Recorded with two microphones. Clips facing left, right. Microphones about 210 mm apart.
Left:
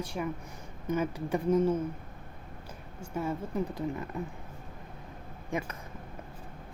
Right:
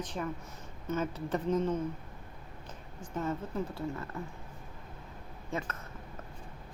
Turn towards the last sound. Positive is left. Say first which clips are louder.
# left 3 dB
turn(degrees=15)  # may be behind; listen again after turning